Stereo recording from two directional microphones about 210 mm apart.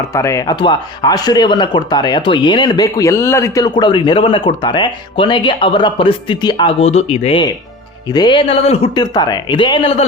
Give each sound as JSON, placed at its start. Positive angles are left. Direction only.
{"t": 0.1, "sound": "speech", "side_deg": 15}